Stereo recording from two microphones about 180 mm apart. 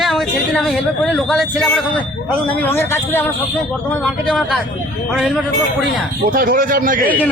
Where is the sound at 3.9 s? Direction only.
Centre (ahead or behind).